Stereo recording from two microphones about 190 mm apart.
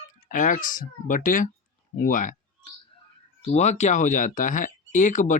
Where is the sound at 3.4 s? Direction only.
35° left (ahead or behind).